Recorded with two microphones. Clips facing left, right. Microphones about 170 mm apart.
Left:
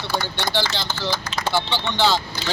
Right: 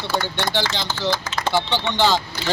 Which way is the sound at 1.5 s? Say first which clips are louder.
Right 3 dB; 15° right (ahead or behind).